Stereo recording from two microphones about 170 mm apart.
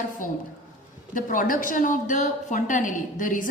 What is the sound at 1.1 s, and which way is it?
A woman's voice, 50° left (ahead or behind).